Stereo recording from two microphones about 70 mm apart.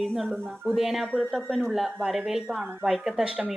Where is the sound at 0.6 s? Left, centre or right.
Centre.